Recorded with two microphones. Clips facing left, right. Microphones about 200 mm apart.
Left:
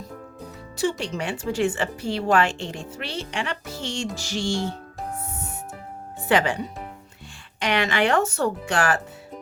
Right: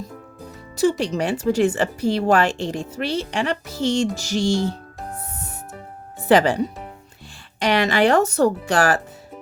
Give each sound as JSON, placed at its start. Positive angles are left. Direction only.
{"t": 0.8, "sound": "speech", "side_deg": -40}
{"t": 6.2, "sound": "speech", "side_deg": -35}
{"t": 7.6, "sound": "speech", "side_deg": -35}